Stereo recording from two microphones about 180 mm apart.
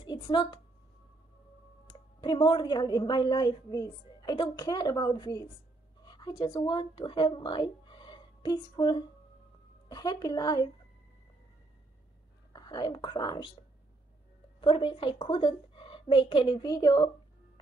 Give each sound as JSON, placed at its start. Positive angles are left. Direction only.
{"t": 0.0, "sound": "a woman's voice", "side_deg": 25}
{"t": 1.9, "sound": "a woman's voice", "side_deg": 25}
{"t": 12.5, "sound": "speech", "side_deg": 25}
{"t": 14.6, "sound": "a woman's voice", "side_deg": 30}